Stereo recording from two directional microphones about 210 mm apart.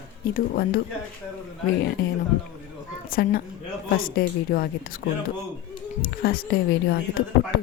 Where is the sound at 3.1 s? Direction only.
45° left (ahead or behind).